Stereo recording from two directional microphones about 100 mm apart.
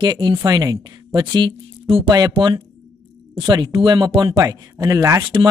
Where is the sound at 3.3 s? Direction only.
50° right (ahead or behind).